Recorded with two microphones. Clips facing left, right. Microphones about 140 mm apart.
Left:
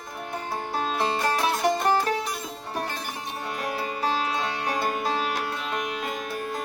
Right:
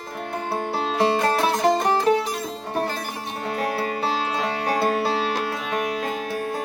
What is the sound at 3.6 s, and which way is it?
Music, 30° right (ahead or behind).